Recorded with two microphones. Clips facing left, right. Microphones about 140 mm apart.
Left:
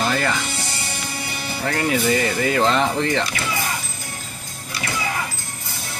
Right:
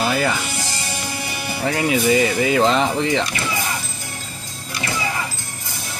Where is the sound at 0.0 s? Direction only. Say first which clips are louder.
Right 2 dB; 10° right (ahead or behind).